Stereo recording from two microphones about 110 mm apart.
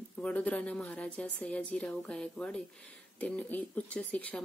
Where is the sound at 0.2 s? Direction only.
10° left (ahead or behind).